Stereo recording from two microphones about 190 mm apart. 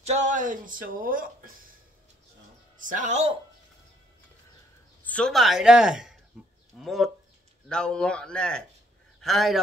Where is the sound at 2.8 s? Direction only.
45° right (ahead or behind).